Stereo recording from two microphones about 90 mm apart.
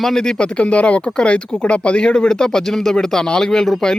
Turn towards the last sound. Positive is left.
turn(degrees=5)  # may be behind; listen again after turning